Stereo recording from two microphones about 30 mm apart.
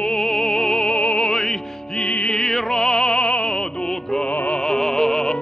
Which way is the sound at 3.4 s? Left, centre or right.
Left.